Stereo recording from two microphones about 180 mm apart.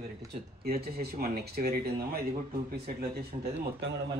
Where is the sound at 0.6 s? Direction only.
55° right (ahead or behind).